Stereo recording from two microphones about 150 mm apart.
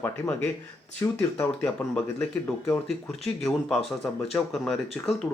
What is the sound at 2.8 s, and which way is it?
Speech, centre (ahead or behind).